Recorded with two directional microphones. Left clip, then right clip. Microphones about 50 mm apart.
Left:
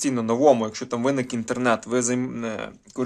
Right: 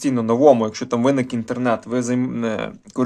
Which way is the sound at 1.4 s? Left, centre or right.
Left.